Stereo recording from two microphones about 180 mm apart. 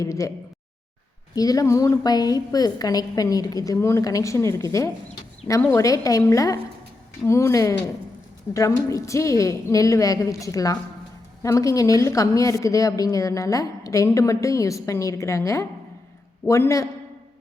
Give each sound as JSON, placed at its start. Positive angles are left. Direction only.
{"t": 0.0, "sound": "speech", "side_deg": 20}
{"t": 1.4, "sound": "a woman's voice", "side_deg": 20}